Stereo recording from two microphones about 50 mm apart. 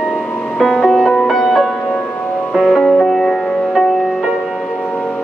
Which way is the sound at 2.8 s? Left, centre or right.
Centre.